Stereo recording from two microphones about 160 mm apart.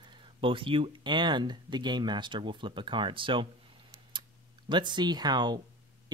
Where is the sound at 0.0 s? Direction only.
30° right (ahead or behind).